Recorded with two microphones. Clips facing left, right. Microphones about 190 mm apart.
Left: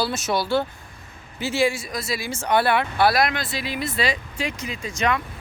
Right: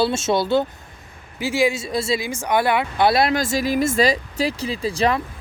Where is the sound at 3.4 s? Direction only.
45° right (ahead or behind).